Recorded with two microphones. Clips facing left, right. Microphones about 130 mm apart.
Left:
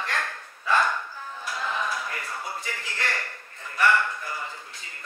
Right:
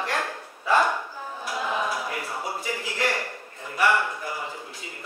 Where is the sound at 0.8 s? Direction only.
10° right (ahead or behind).